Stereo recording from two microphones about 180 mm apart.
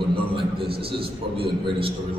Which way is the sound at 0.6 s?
30° right (ahead or behind).